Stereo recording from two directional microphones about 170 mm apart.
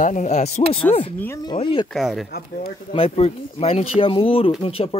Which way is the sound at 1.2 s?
20° left (ahead or behind).